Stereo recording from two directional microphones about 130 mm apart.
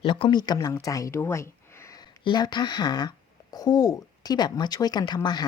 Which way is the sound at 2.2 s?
35° left (ahead or behind).